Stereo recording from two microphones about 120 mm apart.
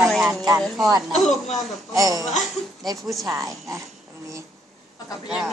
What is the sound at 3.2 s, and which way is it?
Speech, 30° right (ahead or behind).